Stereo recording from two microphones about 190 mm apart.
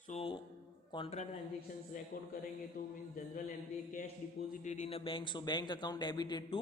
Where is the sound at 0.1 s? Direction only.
30° left (ahead or behind).